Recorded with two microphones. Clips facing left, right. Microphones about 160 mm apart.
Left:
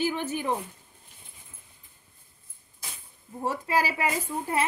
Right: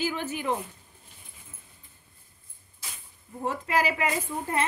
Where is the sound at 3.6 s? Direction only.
35° left (ahead or behind).